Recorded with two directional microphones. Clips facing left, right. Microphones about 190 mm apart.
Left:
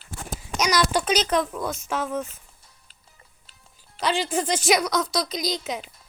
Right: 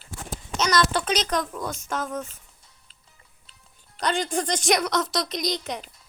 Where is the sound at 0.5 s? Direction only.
10° left (ahead or behind).